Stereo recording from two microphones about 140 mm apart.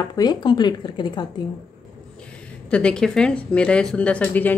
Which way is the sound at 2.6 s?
10° left (ahead or behind).